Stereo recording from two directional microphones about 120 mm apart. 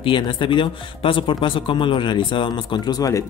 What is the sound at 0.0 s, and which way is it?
Speech, 45° left (ahead or behind).